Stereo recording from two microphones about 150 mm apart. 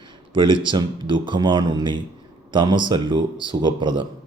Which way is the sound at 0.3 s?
30° right (ahead or behind).